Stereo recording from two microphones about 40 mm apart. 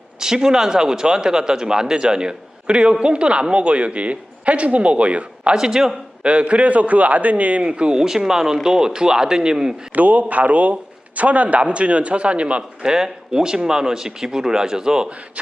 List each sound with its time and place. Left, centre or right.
0.2 s speech: centre; by 5.5 s right
5.5 s speech: centre
6.2 s speech: right
7.9 s speech: centre
9.9 s a man's voice: right
12.9 s speech: centre